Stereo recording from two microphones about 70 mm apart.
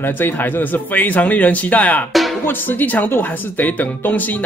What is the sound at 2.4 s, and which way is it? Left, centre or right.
Speech, left.